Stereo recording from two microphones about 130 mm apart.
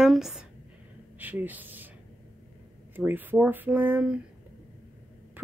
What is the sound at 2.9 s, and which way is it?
Speech, 15° right (ahead or behind).